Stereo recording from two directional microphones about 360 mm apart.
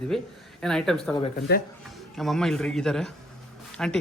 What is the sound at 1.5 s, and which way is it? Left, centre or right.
Speech, left.